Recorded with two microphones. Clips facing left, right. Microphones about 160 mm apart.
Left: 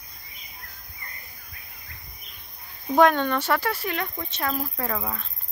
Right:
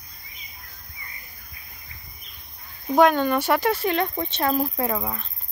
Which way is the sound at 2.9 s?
Centre (ahead or behind).